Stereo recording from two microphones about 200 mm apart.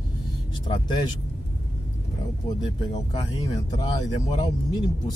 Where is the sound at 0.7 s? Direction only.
20° left (ahead or behind).